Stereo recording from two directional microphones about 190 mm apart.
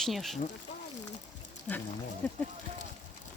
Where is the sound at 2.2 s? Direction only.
10° left (ahead or behind).